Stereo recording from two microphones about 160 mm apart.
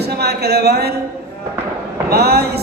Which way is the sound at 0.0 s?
90° right.